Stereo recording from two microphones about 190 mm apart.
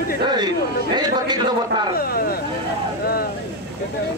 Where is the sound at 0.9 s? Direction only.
20° right (ahead or behind).